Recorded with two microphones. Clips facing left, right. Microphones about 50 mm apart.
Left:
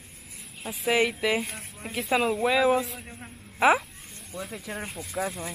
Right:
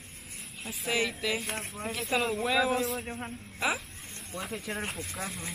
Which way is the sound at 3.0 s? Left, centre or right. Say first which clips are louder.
Right 6 dB; right.